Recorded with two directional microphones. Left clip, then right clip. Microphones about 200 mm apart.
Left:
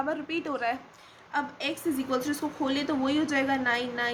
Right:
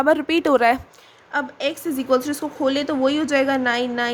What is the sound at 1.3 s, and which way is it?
A woman's voice, 40° right (ahead or behind).